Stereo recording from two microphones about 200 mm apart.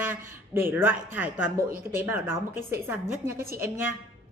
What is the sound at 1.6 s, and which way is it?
Speech, 45° right (ahead or behind).